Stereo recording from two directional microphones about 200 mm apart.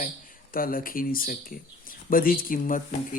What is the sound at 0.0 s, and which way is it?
Speech, 45° left (ahead or behind).